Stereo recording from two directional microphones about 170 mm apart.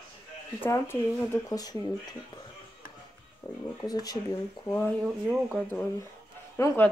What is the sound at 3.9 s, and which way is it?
Speech, 20° left (ahead or behind).